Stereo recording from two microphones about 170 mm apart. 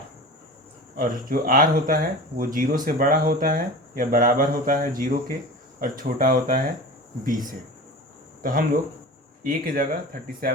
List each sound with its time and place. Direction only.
0.9 s speech: 55° right (ahead or behind)
8.4 s speech: 55° right (ahead or behind)